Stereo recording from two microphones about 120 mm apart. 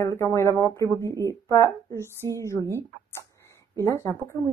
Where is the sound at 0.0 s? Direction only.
25° left (ahead or behind).